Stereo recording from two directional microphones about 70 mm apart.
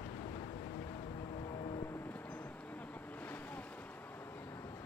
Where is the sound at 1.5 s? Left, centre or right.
Left.